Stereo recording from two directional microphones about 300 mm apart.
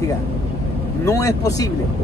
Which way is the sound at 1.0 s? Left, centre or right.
Centre.